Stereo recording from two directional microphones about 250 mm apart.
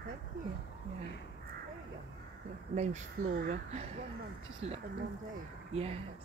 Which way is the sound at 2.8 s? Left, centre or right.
Right.